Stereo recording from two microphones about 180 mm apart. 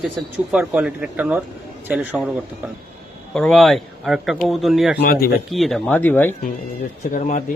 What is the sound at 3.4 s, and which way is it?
Mantra, 5° left (ahead or behind).